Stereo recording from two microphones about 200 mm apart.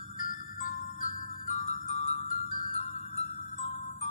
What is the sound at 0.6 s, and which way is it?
Music, 40° left (ahead or behind).